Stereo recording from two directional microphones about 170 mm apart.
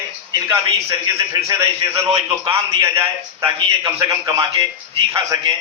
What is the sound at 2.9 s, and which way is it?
A man's voice, 20° right (ahead or behind).